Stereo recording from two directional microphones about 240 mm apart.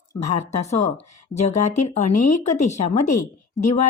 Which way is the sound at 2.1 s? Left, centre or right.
Left.